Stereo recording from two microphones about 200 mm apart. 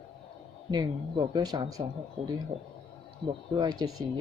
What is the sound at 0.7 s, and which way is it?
Speech, 20° right (ahead or behind).